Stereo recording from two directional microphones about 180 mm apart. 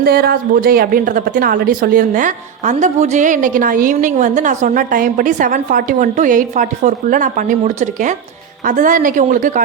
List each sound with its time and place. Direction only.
0.0 s a woman's voice: 55° right (ahead or behind)